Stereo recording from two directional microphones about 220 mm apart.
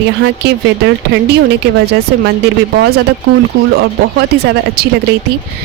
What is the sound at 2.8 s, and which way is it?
A woman's voice, 50° right (ahead or behind).